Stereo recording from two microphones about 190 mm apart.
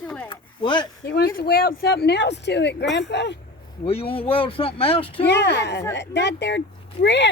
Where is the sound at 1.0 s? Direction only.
55° left (ahead or behind).